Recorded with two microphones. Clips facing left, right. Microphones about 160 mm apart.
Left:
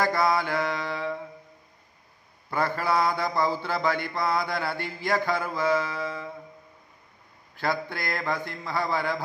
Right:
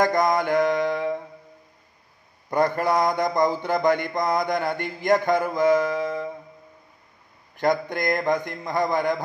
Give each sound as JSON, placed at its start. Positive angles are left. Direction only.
{"t": 0.0, "sound": "mantra", "side_deg": -20}
{"t": 2.5, "sound": "a man's voice", "side_deg": -20}
{"t": 7.5, "sound": "a man's voice", "side_deg": -20}